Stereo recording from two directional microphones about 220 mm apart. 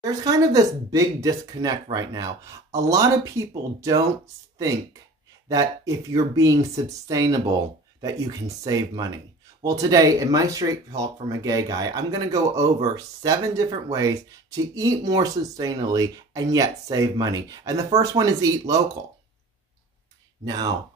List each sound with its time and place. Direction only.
0.0 s speech: 15° right (ahead or behind)
5.5 s speech: 15° right (ahead or behind)
20.4 s speech: 15° right (ahead or behind)